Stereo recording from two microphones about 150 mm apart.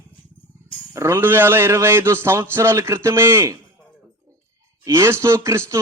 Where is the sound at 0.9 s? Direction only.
15° right (ahead or behind).